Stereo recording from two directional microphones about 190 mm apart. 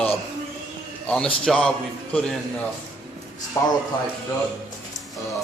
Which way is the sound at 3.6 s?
15° left (ahead or behind).